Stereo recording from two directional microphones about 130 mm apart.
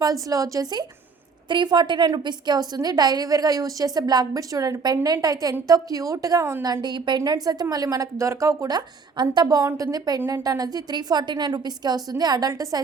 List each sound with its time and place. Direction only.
0.0 s a woman's voice: 25° right (ahead or behind)